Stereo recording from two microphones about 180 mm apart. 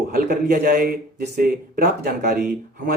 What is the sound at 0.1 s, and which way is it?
A man's voice, 55° right (ahead or behind).